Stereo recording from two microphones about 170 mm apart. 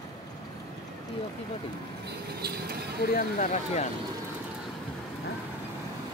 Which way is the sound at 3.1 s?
55° left (ahead or behind).